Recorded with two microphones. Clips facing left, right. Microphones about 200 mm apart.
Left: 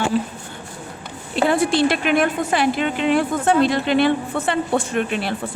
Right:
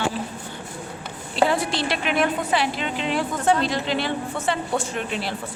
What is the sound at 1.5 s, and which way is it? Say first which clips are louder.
A woman's voice: left 6 dB; 50° left (ahead or behind).